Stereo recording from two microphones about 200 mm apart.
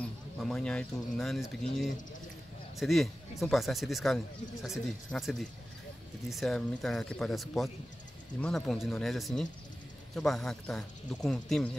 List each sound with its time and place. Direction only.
0.4 s speech: 5° left (ahead or behind)
2.8 s speech: centre (ahead or behind)